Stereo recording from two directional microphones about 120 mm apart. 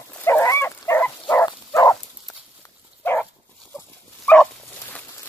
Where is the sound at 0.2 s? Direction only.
20° left (ahead or behind).